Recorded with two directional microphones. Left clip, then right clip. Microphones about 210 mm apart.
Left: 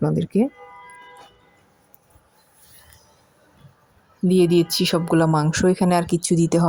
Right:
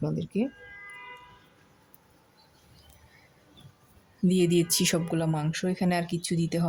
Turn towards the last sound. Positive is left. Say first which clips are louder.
# left 11 dB
turn(degrees=25)  # may be behind; listen again after turning